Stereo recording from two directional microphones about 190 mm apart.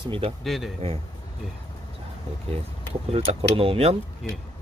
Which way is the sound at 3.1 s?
30° right (ahead or behind).